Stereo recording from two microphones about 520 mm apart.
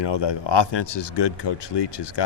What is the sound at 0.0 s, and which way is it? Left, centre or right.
Speech, left.